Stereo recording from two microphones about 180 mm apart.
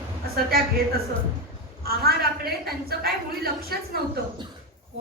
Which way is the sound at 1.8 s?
60° right (ahead or behind).